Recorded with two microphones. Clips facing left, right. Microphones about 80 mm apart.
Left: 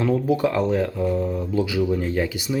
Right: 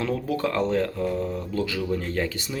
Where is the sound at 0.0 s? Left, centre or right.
Centre.